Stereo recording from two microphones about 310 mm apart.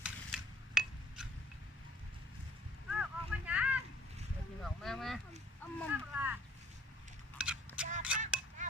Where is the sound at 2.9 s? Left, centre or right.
Centre.